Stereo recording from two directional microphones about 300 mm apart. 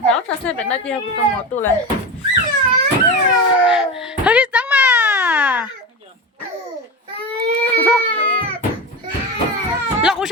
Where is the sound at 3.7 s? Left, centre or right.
Centre.